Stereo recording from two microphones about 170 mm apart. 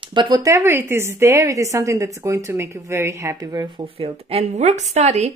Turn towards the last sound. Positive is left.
turn(degrees=-40)  # may be behind; listen again after turning